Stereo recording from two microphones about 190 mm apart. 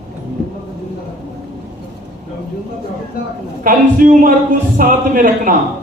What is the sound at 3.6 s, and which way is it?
A man's voice, 45° right (ahead or behind).